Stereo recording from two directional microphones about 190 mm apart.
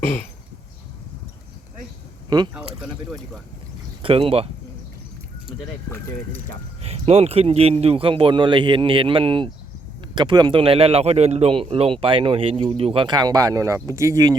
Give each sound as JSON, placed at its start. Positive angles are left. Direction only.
{"t": 2.3, "sound": "speech", "side_deg": -20}
{"t": 4.0, "sound": "a man's voice", "side_deg": -30}
{"t": 6.8, "sound": "a man's voice", "side_deg": -35}